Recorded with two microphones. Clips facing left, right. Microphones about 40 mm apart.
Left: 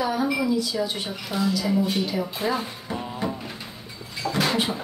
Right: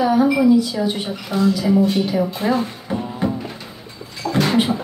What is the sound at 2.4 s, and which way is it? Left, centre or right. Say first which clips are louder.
Speech: right 5 dB; centre.